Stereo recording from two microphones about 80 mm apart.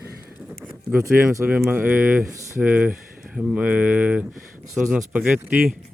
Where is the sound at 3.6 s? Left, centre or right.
Centre.